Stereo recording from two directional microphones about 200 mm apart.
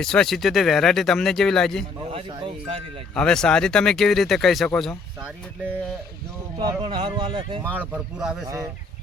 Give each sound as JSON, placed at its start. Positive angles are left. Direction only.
{"t": 0.0, "sound": "speech", "side_deg": 5}
{"t": 2.1, "sound": "speech", "side_deg": -30}
{"t": 3.2, "sound": "speech", "side_deg": 5}
{"t": 6.6, "sound": "speech", "side_deg": -20}
{"t": 7.8, "sound": "speech", "side_deg": -5}